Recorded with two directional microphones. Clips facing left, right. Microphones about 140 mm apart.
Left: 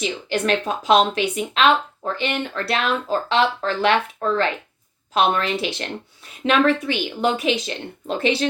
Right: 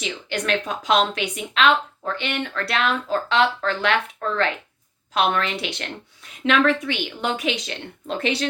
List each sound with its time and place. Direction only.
0.0 s speech: 35° left (ahead or behind)